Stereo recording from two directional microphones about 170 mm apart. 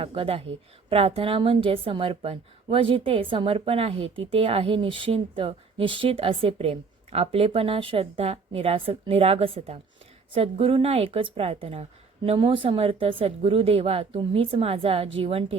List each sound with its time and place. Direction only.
0.0 s a woman's voice: 35° right (ahead or behind)